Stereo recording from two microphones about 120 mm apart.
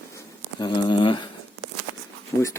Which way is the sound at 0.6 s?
40° left (ahead or behind).